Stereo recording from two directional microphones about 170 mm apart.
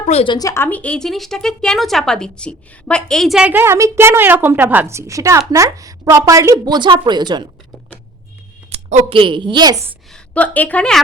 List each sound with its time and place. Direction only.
0.0 s speech: 40° left (ahead or behind)
0.3 s a woman's voice: 20° left (ahead or behind); by 7.4 s 25° right (ahead or behind)
8.7 s a sound: 40° right (ahead or behind)
9.1 s a woman's voice: 30° right (ahead or behind)
10.1 s a woman's voice: 10° left (ahead or behind)